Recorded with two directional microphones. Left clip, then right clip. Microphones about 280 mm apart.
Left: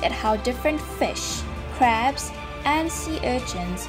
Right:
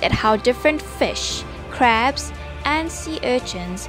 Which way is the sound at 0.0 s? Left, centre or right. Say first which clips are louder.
Right 5 dB; right.